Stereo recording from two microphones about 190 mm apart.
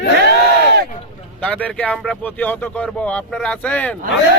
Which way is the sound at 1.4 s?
5° left (ahead or behind).